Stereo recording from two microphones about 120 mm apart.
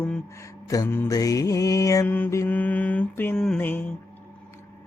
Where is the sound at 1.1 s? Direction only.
30° left (ahead or behind).